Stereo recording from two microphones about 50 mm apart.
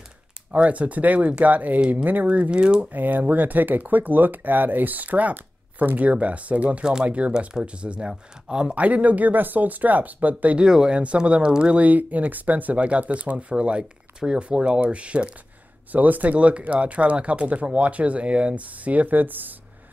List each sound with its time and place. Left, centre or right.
0.5 s speech: right
2.9 s speech: right
6.8 s speech: centre
7.1 s speech: right
10.6 s speech: centre
15.9 s speech: right